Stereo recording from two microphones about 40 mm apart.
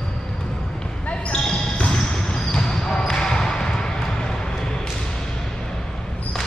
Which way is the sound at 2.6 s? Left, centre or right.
Centre.